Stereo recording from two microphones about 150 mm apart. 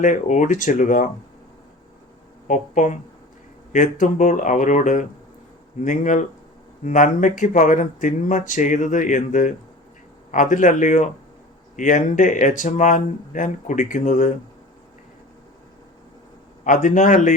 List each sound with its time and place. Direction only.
0.0 s speech: 55° left (ahead or behind)
2.5 s speech: 55° left (ahead or behind)
16.6 s speech: 55° left (ahead or behind)